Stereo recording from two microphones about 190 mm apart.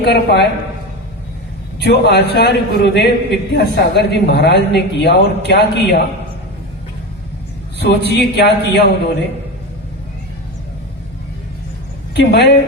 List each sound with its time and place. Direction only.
0.0 s a man's voice: 60° left (ahead or behind)
1.8 s a man's voice: 60° left (ahead or behind)
7.8 s a man's voice: 60° left (ahead or behind)
12.1 s a man's voice: 65° left (ahead or behind)